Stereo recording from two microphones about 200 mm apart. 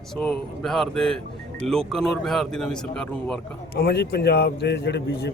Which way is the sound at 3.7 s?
50° left (ahead or behind).